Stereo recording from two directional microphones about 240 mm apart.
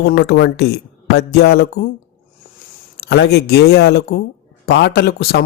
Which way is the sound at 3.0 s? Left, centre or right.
Left.